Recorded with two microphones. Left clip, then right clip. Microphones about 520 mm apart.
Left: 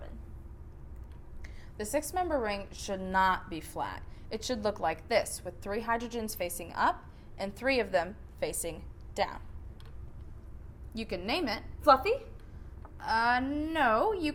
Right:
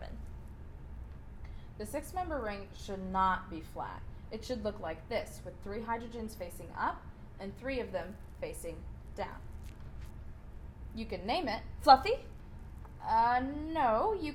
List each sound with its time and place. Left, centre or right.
1.8 s a woman's voice: left
10.9 s a woman's voice: left
13.0 s a woman's voice: left